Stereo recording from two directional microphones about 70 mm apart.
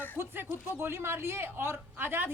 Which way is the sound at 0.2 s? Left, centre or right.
Right.